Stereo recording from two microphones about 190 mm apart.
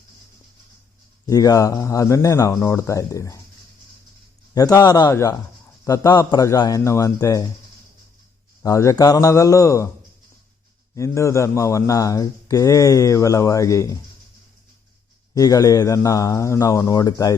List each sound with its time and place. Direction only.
1.3 s a man's voice: 20° left (ahead or behind)
4.5 s a man's voice: 20° left (ahead or behind)
8.6 s a man's voice: 15° left (ahead or behind)
10.9 s a man's voice: 15° left (ahead or behind)
15.4 s a man's voice: 20° left (ahead or behind)